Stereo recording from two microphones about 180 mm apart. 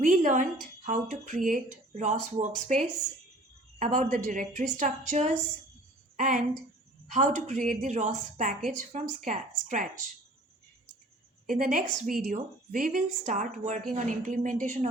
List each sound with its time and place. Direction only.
0.0 s a woman's voice: 45° right (ahead or behind)
11.4 s a woman's voice: 50° right (ahead or behind)